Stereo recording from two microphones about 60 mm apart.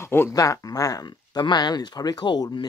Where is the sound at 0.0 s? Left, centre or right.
Left.